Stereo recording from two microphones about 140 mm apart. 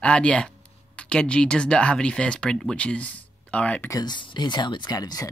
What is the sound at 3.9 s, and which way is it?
Speech, 30° left (ahead or behind).